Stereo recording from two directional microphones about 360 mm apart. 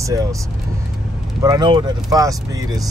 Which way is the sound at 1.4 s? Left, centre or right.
Centre.